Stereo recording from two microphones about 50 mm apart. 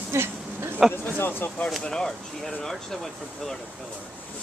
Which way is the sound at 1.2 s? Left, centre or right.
Left.